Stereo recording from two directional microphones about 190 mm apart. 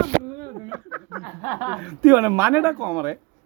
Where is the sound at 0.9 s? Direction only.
Centre (ahead or behind).